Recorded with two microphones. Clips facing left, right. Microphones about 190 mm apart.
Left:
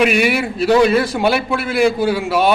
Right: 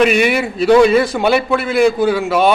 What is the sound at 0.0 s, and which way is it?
A man's voice, 5° left (ahead or behind).